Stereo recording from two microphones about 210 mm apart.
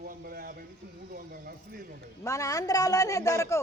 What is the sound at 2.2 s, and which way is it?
A man's voice, 15° left (ahead or behind).